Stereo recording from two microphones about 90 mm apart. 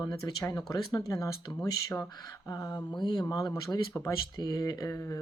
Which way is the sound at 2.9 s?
55° left (ahead or behind).